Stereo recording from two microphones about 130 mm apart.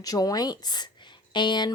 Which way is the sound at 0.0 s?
30° left (ahead or behind).